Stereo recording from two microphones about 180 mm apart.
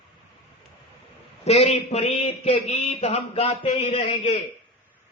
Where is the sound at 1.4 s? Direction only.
35° left (ahead or behind).